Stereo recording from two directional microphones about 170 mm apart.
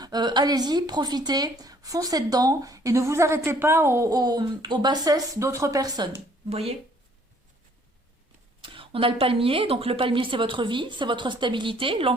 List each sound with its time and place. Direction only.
0.0 s speech: 25° right (ahead or behind)
6.5 s speech: 35° right (ahead or behind)
8.6 s speech: 30° right (ahead or behind)